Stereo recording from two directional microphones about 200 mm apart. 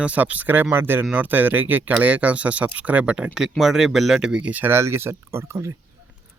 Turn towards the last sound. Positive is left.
turn(degrees=-15)  # may be behind; listen again after turning